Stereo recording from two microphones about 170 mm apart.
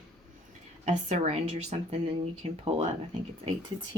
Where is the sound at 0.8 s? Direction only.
40° right (ahead or behind).